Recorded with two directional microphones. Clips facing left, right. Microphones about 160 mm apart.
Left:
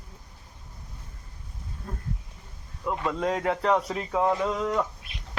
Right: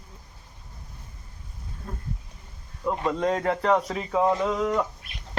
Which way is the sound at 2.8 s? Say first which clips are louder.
Right 2 dB; centre (ahead or behind).